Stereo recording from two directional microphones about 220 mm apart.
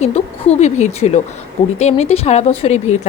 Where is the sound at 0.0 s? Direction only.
30° left (ahead or behind).